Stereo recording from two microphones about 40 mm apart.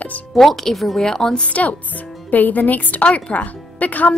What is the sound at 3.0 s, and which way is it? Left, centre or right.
Speech, left.